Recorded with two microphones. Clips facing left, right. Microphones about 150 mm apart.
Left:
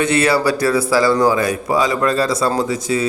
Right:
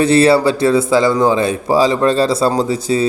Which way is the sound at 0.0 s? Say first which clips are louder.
Right 5 dB; 30° right (ahead or behind).